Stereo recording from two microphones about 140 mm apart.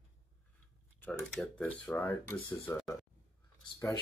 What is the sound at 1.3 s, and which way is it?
Speech, 5° left (ahead or behind).